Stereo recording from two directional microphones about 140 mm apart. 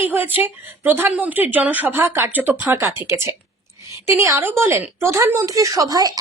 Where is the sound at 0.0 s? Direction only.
15° right (ahead or behind).